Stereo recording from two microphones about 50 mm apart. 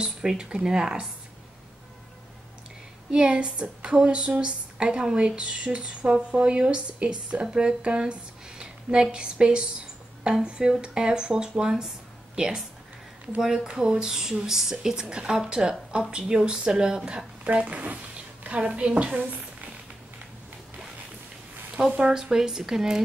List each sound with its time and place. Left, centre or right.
0.0 s a woman's voice: centre
3.1 s a woman's voice: right
13.7 s a woman's voice: centre
18.4 s a sound: right
18.8 s a woman's voice: right
21.7 s a woman's voice: right
22.1 s a woman's voice: centre